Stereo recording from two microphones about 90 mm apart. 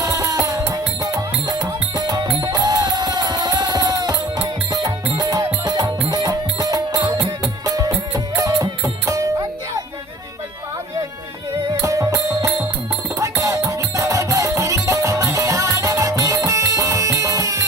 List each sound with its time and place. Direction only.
0.0 s music: 40° right (ahead or behind)
8.1 s music: 35° right (ahead or behind)
11.8 s music: 35° right (ahead or behind)